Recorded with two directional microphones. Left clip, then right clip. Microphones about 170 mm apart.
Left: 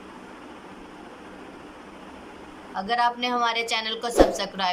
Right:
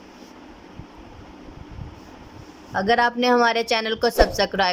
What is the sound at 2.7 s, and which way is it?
A woman's voice, 55° right (ahead or behind).